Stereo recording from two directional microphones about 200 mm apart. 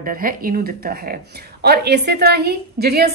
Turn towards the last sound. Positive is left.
turn(degrees=-50)  # may be behind; listen again after turning